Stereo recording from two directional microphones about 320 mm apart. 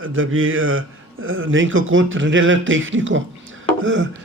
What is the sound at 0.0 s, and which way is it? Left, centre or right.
A man's voice, right.